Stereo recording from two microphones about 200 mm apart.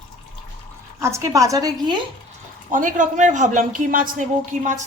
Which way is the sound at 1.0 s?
15° right (ahead or behind).